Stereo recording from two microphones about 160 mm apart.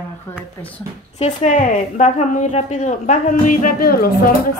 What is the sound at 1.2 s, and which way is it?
A woman's voice, 50° left (ahead or behind).